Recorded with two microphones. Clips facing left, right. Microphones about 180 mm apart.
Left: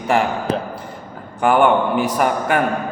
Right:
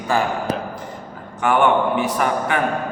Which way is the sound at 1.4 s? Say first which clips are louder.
Left 2 dB; 35° left (ahead or behind).